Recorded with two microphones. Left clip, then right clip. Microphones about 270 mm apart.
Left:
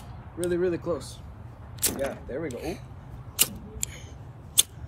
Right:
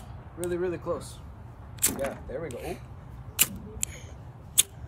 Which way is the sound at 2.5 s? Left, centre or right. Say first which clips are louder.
Left 2 dB; centre.